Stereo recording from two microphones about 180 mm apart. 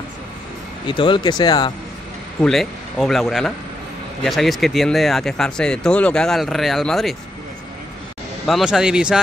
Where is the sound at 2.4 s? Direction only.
Centre (ahead or behind).